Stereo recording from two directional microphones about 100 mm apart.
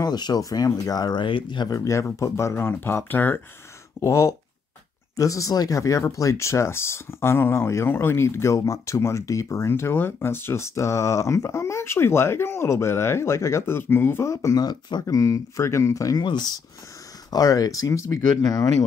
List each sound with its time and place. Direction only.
0.0 s speech: 45° left (ahead or behind)
1.7 s speech: 30° left (ahead or behind)
4.0 s speech: 35° left (ahead or behind)